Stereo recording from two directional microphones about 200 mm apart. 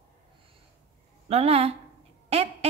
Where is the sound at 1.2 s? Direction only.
30° right (ahead or behind).